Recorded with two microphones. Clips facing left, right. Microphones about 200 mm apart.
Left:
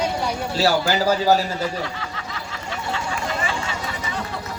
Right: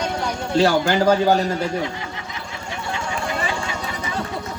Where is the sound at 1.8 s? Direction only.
20° right (ahead or behind).